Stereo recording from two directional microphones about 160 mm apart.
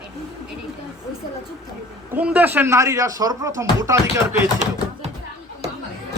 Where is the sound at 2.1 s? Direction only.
10° right (ahead or behind).